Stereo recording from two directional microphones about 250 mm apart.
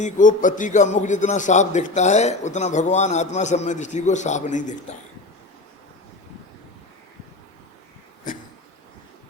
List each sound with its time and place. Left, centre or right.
0.0 s a man's voice: left